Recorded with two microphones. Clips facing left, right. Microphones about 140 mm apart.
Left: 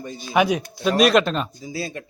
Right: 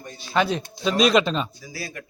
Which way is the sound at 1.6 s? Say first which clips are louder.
Left 6 dB; 25° left (ahead or behind).